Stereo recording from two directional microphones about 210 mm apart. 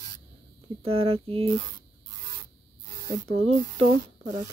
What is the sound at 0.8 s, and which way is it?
Speech, 25° right (ahead or behind).